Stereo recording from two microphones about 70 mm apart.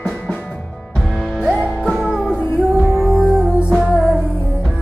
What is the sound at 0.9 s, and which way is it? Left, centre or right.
Music, centre.